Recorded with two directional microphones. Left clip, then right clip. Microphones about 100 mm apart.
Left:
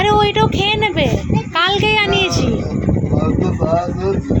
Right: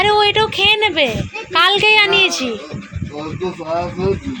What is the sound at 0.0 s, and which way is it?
Speech, 25° left (ahead or behind).